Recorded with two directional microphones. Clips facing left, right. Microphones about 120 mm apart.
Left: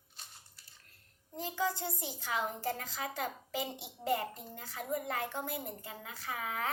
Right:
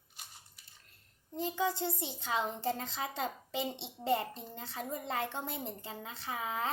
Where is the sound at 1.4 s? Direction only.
25° right (ahead or behind).